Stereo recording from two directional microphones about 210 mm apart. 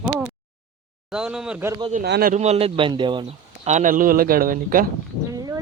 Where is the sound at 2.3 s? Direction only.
30° right (ahead or behind).